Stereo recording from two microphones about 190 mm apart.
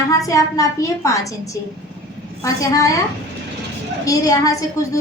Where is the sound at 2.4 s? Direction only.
15° left (ahead or behind).